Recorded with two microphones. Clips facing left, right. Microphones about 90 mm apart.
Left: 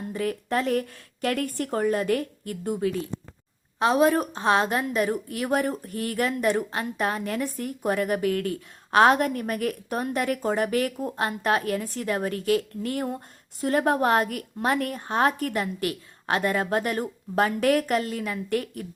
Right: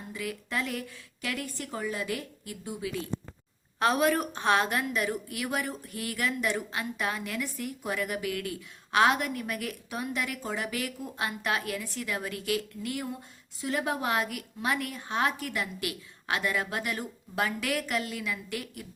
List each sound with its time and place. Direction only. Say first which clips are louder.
0.1 s a woman's voice: left 7 dB; 45° left (ahead or behind)
3.8 s a woman's voice: left 5 dB; 25° left (ahead or behind); by 18.9 s 45° left (ahead or behind)